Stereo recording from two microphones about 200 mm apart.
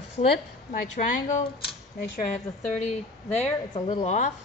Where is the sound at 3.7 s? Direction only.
25° left (ahead or behind).